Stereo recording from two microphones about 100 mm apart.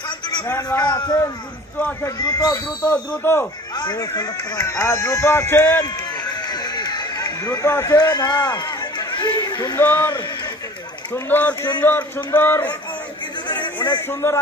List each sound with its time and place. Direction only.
0.7 s speech: 15° left (ahead or behind)
2.0 s a man's voice: 40° left (ahead or behind)
2.8 s speech: 15° left (ahead or behind)
3.7 s speech: 45° left (ahead or behind)
4.1 s speech: 30° left (ahead or behind)
6.2 s run: 40° left (ahead or behind)
8.0 s a sound: 45° left (ahead or behind)
9.8 s speech: 25° left (ahead or behind)
11.2 s speech: 20° left (ahead or behind)
13.6 s a sound: 50° left (ahead or behind)
13.9 s speech: 25° left (ahead or behind)